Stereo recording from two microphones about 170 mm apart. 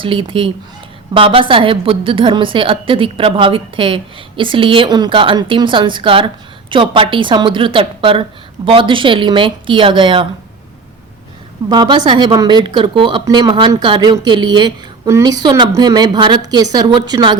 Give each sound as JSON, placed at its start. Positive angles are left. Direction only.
{"t": 0.0, "sound": "a woman's voice", "side_deg": -30}
{"t": 11.7, "sound": "a woman's voice", "side_deg": -25}